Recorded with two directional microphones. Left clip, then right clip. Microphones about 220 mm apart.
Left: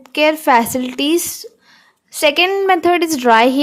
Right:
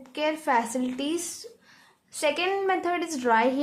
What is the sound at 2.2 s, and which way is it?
A woman's voice, 35° left (ahead or behind).